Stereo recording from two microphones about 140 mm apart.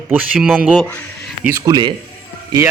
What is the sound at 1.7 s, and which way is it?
Speech, 30° right (ahead or behind).